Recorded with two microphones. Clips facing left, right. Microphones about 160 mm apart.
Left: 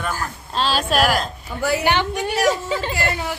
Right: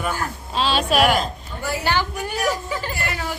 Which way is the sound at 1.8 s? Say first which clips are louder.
Left 3 dB; 20° left (ahead or behind).